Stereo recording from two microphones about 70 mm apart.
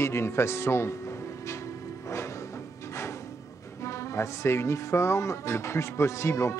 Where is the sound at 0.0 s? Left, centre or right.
Left.